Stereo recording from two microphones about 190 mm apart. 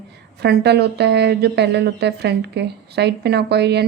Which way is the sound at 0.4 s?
60° right (ahead or behind).